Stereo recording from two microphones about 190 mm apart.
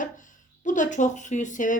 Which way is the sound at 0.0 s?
40° left (ahead or behind).